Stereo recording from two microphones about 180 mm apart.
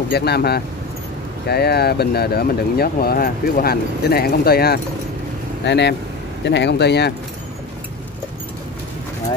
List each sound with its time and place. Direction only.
0.1 s speech: 65° left (ahead or behind)
5.7 s speech: 70° left (ahead or behind)